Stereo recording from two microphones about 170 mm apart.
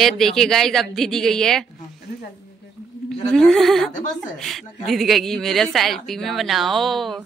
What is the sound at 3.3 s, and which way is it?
Speech, 5° left (ahead or behind).